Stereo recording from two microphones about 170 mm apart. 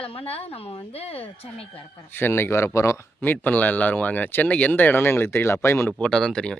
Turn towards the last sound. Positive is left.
turn(degrees=5)  # may be behind; listen again after turning